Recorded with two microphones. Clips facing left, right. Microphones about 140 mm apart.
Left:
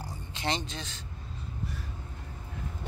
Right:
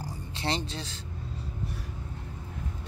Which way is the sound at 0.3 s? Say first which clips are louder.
Right 1 dB; 35° right (ahead or behind).